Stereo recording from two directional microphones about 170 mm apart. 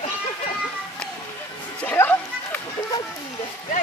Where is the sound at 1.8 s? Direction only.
10° left (ahead or behind).